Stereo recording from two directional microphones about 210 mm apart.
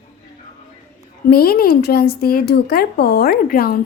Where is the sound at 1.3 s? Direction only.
45° left (ahead or behind).